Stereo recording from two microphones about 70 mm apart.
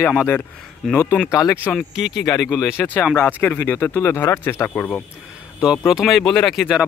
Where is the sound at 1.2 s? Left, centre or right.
Left.